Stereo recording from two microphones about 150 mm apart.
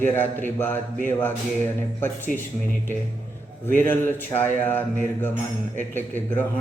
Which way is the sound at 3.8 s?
15° left (ahead or behind).